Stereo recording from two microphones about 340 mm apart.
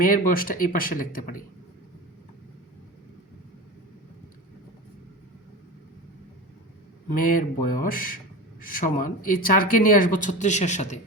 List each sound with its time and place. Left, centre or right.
0.0 s speech: left
7.1 s speech: left